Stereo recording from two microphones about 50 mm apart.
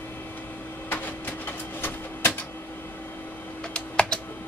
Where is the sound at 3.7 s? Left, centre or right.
Centre.